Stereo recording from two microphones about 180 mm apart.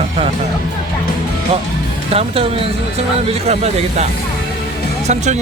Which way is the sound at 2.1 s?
35° right (ahead or behind).